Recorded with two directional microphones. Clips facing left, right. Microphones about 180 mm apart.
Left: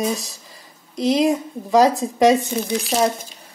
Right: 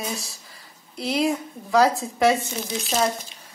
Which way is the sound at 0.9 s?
20° left (ahead or behind).